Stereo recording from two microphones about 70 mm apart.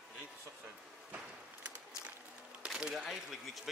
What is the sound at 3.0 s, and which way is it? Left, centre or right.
Speech, centre.